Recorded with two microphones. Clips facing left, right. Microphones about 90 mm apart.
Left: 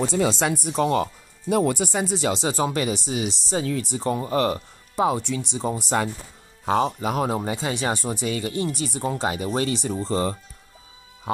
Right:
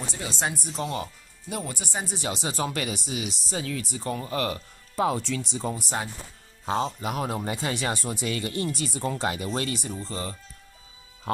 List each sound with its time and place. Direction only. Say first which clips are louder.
0.0 s speech: left 10 dB; 90° left
0.7 s speech: left 9 dB; 60° left (ahead or behind); by 2.1 s 90° left
2.3 s speech: left 6 dB; 30° left (ahead or behind)
4.6 s speech: left 3 dB; 20° left (ahead or behind)
6.6 s speech: left 5 dB; 60° left (ahead or behind)
7.0 s speech: left 5 dB; 30° left (ahead or behind)